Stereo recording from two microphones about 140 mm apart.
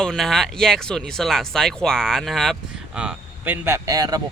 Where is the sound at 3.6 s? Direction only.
20° right (ahead or behind).